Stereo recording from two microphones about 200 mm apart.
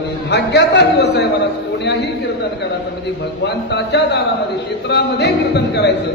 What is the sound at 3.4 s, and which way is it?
A man's voice, 55° left (ahead or behind).